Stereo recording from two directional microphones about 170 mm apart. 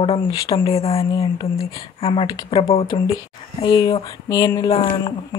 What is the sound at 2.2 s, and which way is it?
Speech, 25° left (ahead or behind).